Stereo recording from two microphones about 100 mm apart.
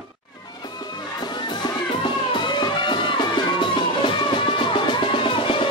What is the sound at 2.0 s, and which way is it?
Music, 50° left (ahead or behind).